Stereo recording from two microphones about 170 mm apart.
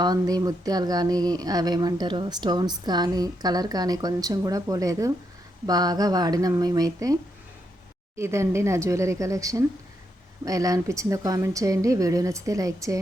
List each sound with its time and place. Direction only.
0.0 s speech: 25° right (ahead or behind)